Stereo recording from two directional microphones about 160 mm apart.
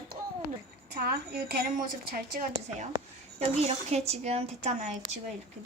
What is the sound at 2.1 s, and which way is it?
Speech, 60° right (ahead or behind).